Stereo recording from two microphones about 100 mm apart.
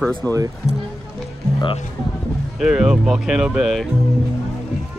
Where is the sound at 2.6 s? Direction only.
5° right (ahead or behind).